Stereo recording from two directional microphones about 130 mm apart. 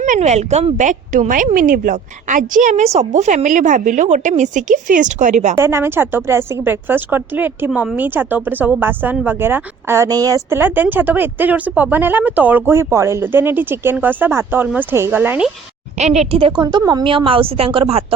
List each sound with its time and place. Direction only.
0.0 s a woman's voice: 65° right (ahead or behind)
5.5 s a woman's voice: 20° right (ahead or behind)
16.0 s a woman's voice: 60° right (ahead or behind)
16.5 s a woman's voice: 35° right (ahead or behind)